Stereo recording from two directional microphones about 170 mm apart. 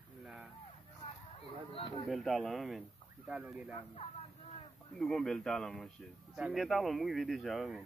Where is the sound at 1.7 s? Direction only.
30° left (ahead or behind).